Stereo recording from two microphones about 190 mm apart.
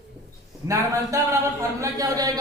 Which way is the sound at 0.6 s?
15° right (ahead or behind).